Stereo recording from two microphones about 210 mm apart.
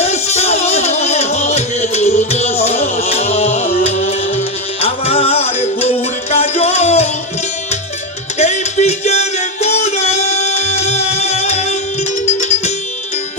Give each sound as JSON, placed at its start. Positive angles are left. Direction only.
{"t": 0.0, "sound": "music", "side_deg": 30}
{"t": 8.4, "sound": "music", "side_deg": 30}